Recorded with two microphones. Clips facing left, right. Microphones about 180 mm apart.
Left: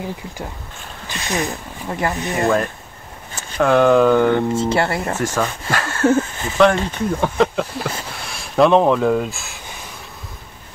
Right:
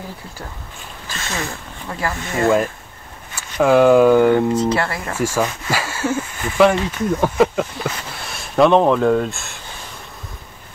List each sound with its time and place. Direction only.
1.0 s speech: 15° left (ahead or behind)
3.5 s speech: 5° right (ahead or behind)
4.6 s speech: 25° left (ahead or behind)
5.1 s speech: 10° right (ahead or behind)